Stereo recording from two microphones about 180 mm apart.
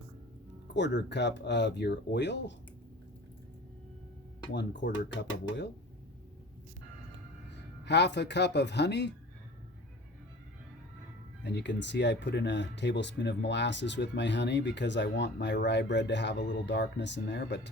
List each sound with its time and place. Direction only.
0.7 s speech: 75° left (ahead or behind)
4.5 s speech: 85° left
7.9 s speech: 70° left (ahead or behind)
11.4 s speech: 75° left (ahead or behind)